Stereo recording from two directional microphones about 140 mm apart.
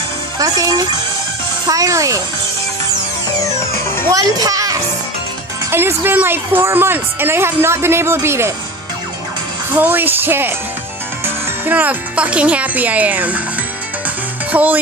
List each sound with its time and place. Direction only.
0.4 s a child's voice: 25° right (ahead or behind)
3.3 s music: 20° left (ahead or behind)
4.1 s a child's voice: 25° right (ahead or behind)
9.8 s a woman's voice: 15° right (ahead or behind)
14.5 s music: 10° right (ahead or behind)